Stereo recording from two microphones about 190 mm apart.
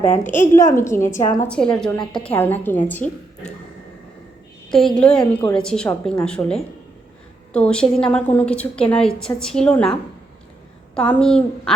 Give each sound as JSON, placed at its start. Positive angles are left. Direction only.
{"t": 0.1, "sound": "a woman's voice", "side_deg": 40}
{"t": 0.5, "sound": "a woman's voice", "side_deg": 15}
{"t": 4.7, "sound": "a woman's voice", "side_deg": 0}
{"t": 5.2, "sound": "a woman's voice", "side_deg": 15}
{"t": 5.5, "sound": "a woman's voice", "side_deg": 5}